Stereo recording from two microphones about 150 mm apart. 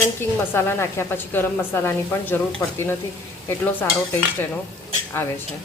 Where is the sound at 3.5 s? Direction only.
15° left (ahead or behind).